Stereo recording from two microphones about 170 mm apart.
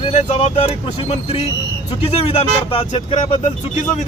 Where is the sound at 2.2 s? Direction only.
35° left (ahead or behind).